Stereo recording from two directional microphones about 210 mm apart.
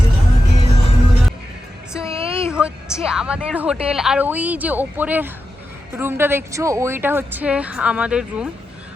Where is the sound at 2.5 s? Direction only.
5° right (ahead or behind).